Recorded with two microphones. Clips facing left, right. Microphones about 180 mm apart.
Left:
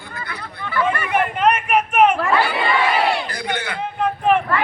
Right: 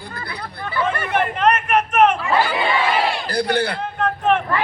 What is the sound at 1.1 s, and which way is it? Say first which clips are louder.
Speech: even; 5° left (ahead or behind).